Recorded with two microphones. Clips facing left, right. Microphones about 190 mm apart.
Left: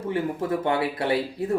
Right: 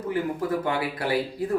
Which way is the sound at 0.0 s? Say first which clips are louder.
Even; 25° left (ahead or behind).